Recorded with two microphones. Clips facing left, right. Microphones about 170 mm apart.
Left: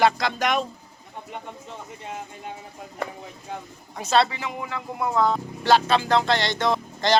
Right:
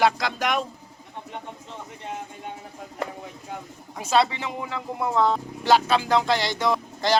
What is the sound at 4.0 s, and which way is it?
Speech, 10° right (ahead or behind).